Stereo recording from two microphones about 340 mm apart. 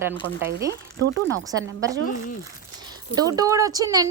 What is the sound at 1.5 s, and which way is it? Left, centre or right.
Speech, right.